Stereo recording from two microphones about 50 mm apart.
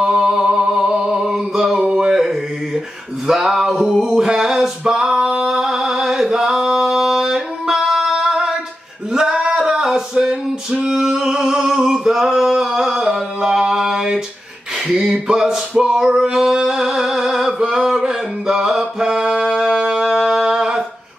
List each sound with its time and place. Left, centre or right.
0.0 s music: centre
3.3 s male singing: centre
9.1 s singing: centre
9.6 s a sound: centre
10.1 s singing: centre
14.9 s a sound: centre
15.5 s male singing: centre
19.5 s music: centre